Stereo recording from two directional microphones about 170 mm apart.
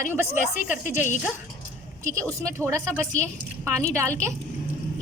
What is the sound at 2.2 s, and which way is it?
Speech, 10° left (ahead or behind).